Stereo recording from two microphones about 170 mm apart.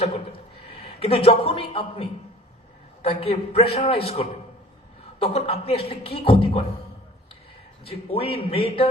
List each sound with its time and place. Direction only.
0.7 s a man's voice: 35° left (ahead or behind)
7.9 s speech: 35° left (ahead or behind)